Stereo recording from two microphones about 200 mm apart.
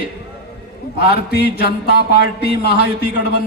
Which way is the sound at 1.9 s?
50° left (ahead or behind).